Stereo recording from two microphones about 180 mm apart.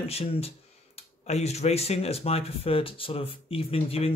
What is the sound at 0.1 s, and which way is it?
Speech, 35° left (ahead or behind).